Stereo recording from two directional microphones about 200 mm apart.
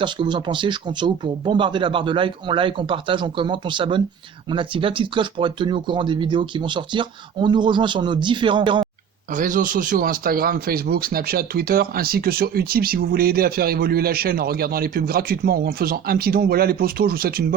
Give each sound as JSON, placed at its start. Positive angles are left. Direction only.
{"t": 0.0, "sound": "speech", "side_deg": -25}
{"t": 9.3, "sound": "speech", "side_deg": -40}